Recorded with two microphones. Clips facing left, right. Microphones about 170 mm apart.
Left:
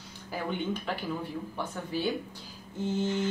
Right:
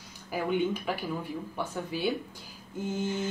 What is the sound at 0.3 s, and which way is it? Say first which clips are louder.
A woman's voice: right 4 dB; 10° right (ahead or behind).